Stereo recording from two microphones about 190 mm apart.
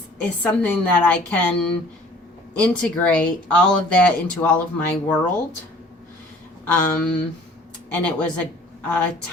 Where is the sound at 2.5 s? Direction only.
5° left (ahead or behind).